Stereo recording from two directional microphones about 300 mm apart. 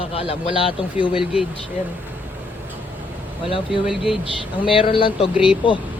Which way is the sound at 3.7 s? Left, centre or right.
Centre.